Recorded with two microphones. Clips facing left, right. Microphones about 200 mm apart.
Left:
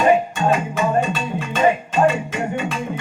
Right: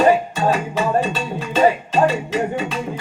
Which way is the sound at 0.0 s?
35° right (ahead or behind).